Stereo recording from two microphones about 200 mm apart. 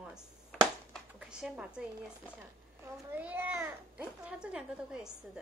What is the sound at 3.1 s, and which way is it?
Speech, 10° right (ahead or behind).